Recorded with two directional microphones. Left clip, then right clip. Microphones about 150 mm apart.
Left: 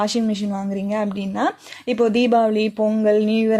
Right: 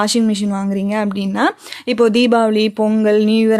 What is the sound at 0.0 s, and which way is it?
Speech, 25° right (ahead or behind).